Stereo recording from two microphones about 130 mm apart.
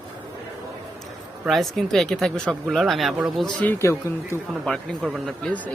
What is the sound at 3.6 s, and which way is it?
Speech, 20° left (ahead or behind).